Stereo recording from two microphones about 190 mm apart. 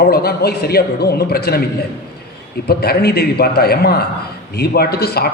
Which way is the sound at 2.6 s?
55° left (ahead or behind).